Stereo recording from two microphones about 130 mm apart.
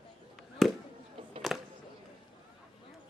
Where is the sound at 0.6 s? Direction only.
Centre (ahead or behind).